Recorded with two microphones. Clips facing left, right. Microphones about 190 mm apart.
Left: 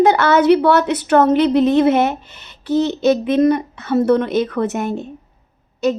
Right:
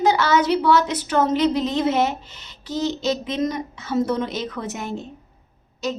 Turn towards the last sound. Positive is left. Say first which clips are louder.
# left 9 dB
turn(degrees=60)  # may be behind; listen again after turning